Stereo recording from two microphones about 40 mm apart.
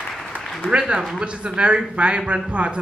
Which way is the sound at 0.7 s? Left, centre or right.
Right.